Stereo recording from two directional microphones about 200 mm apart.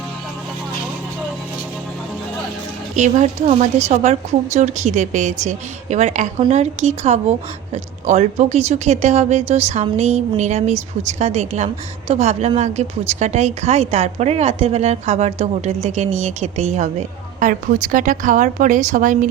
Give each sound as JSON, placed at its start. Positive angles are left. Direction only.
{"t": 2.9, "sound": "a woman's voice", "side_deg": -35}